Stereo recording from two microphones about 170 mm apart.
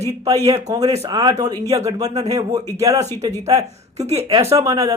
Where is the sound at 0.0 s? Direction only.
20° right (ahead or behind).